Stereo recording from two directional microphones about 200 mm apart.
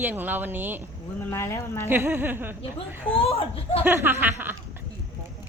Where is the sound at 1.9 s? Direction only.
10° right (ahead or behind).